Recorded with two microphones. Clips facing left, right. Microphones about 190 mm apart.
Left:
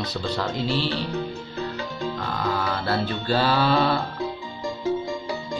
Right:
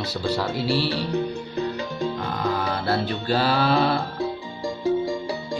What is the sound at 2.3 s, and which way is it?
Speech, 15° right (ahead or behind).